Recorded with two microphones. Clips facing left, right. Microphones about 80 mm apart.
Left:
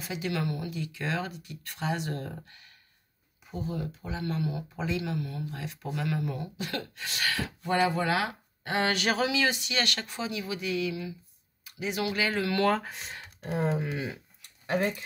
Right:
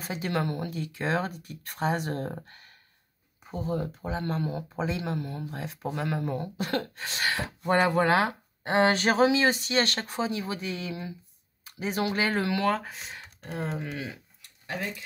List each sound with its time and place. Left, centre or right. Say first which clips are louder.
0.0 s speech: right 2 dB; right
7.6 s speech: right 4 dB; right
12.5 s speech: left 1 dB; centre